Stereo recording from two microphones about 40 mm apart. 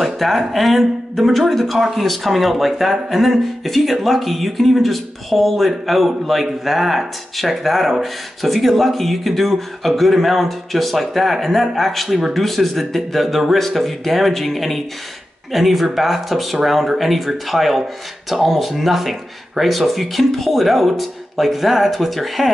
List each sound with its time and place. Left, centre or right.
0.0 s speech: centre